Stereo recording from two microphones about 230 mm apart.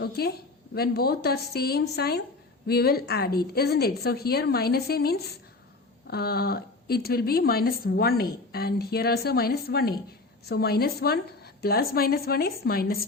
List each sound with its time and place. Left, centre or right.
0.2 s a woman's voice: left